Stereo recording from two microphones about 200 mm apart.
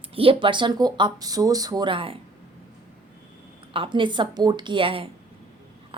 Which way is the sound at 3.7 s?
25° right (ahead or behind).